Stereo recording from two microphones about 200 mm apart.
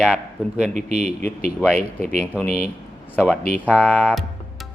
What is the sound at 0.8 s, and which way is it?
Speech, 35° right (ahead or behind).